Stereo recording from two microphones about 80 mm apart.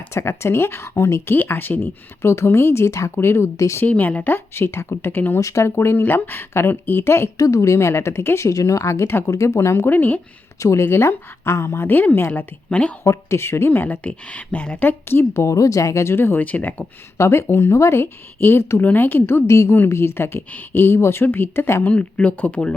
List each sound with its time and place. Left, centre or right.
0.1 s speech: left
3.8 s speech: centre
5.4 s speech: left
7.3 s speech: left
8.5 s speech: left
10.6 s a woman's voice: left; by 12.9 s centre
13.1 s speech: left
16.4 s speech: centre
17.2 s speech: left
21.8 s speech: centre